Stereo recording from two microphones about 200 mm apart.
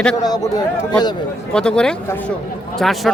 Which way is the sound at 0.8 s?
20° left (ahead or behind).